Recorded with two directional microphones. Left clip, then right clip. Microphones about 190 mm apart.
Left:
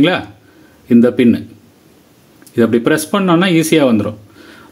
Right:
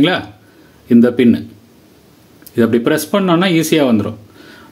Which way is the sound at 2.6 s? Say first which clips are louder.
Left 1 dB; 10° left (ahead or behind).